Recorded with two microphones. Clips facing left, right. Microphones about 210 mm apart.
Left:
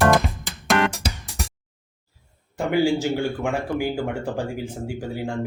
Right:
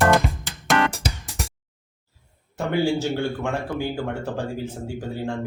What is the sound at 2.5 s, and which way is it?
Speech, 10° left (ahead or behind).